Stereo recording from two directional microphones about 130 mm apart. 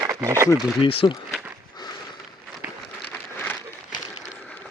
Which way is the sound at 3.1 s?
15° left (ahead or behind).